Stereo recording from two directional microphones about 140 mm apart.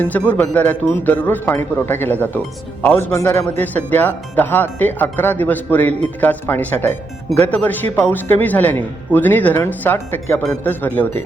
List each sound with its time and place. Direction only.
0.0 s speech: 10° left (ahead or behind)
3.1 s a man's voice: 20° left (ahead or behind)